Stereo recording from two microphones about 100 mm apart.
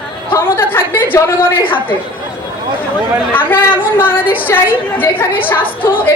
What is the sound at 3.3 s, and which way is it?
A woman's voice, 20° left (ahead or behind).